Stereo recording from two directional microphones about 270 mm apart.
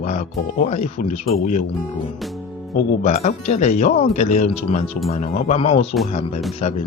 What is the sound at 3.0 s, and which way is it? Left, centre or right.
Speech, left.